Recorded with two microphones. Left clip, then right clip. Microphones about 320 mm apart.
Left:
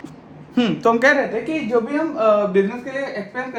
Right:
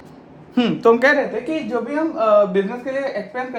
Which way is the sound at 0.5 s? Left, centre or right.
Centre.